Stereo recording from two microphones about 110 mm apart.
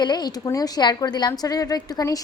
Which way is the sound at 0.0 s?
40° left (ahead or behind).